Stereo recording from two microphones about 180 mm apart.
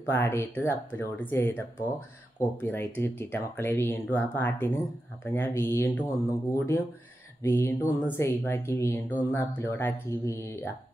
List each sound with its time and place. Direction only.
0.1 s speech: 15° left (ahead or behind)